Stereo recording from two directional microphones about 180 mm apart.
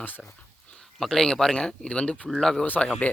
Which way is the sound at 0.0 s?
10° left (ahead or behind).